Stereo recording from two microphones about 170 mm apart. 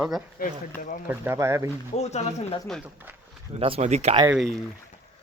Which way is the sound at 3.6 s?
40° right (ahead or behind).